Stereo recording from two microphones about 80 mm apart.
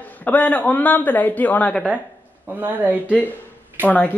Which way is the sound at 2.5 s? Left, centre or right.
Right.